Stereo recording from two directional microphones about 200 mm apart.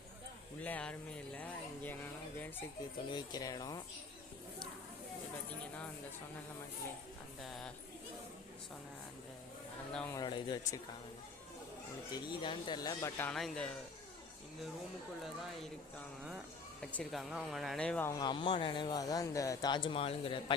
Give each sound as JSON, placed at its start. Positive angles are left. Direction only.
{"t": 0.6, "sound": "speech", "side_deg": 5}
{"t": 1.4, "sound": "a sound", "side_deg": 10}
{"t": 3.1, "sound": "speech", "side_deg": 20}
{"t": 7.4, "sound": "speech", "side_deg": 0}
{"t": 9.9, "sound": "speech", "side_deg": 5}
{"t": 10.2, "sound": "speech", "side_deg": 20}
{"t": 12.1, "sound": "speech", "side_deg": 25}
{"t": 16.8, "sound": "speech", "side_deg": 0}
{"t": 18.1, "sound": "speech", "side_deg": 20}